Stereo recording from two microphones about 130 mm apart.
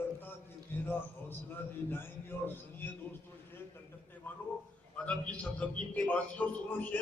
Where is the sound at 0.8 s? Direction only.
15° left (ahead or behind).